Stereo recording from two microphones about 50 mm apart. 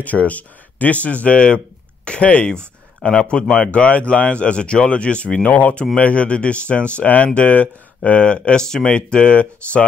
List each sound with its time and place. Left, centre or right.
0.0 s speech: left